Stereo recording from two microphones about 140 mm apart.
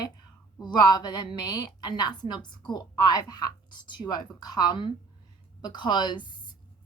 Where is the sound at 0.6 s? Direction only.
30° left (ahead or behind).